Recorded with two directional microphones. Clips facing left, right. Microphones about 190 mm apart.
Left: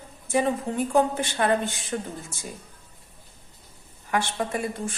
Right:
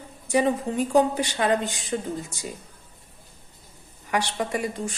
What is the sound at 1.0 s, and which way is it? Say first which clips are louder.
A woman's voice: right 2 dB; 15° right (ahead or behind).